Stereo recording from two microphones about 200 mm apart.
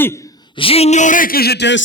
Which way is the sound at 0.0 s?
15° left (ahead or behind).